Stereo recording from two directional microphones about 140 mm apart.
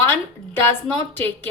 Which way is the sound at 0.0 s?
15° left (ahead or behind).